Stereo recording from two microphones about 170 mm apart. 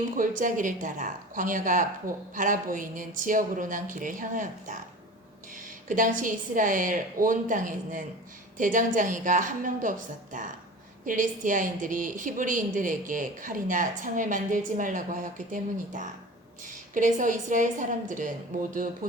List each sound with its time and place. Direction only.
0.2 s a woman's voice: 50° right (ahead or behind)
11.0 s a woman's voice: 50° right (ahead or behind)